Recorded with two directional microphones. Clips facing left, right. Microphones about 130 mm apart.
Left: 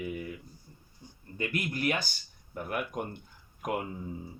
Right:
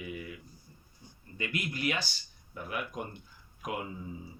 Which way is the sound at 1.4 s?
50° left (ahead or behind).